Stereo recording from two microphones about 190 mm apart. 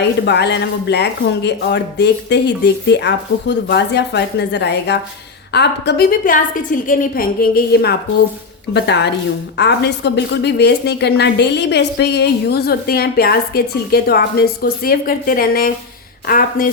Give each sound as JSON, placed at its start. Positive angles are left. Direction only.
{"t": 0.0, "sound": "a woman's voice", "side_deg": 65}